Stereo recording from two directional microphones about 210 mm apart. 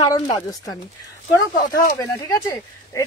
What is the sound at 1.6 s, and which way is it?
Speech, 45° left (ahead or behind).